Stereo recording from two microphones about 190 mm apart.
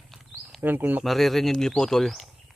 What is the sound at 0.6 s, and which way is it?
Speech, 10° right (ahead or behind).